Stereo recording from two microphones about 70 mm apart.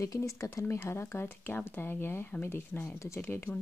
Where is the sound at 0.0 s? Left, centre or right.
Left.